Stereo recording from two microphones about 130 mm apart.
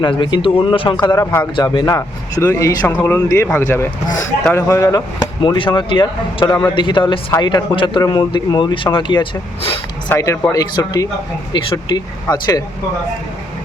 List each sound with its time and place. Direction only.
0.0 s speech: 35° left (ahead or behind); by 1.5 s 20° left (ahead or behind)
1.5 s speech: 30° left (ahead or behind)
10.2 s speech: 25° left (ahead or behind)